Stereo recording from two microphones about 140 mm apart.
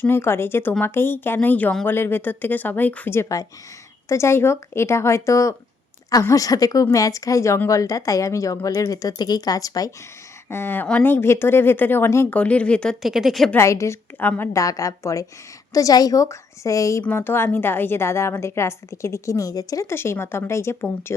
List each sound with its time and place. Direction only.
0.0 s a woman's voice: 15° left (ahead or behind); by 13.5 s centre (ahead or behind)
13.5 s a woman's voice: 20° left (ahead or behind)